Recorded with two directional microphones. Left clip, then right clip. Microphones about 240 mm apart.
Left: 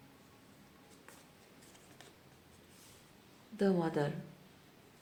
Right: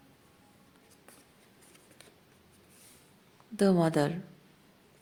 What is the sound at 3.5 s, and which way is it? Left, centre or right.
Speech, right.